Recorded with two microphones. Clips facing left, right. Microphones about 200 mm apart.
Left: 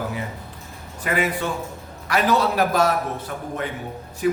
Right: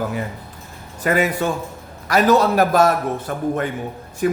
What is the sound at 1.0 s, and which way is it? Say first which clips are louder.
Speech: right 5 dB; 45° right (ahead or behind).